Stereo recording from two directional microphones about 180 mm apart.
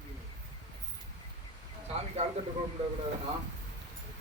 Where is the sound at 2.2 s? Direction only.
35° right (ahead or behind).